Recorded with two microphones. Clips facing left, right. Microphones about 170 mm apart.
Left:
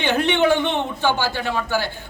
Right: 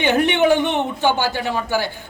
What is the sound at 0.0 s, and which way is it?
A man's voice, 15° right (ahead or behind).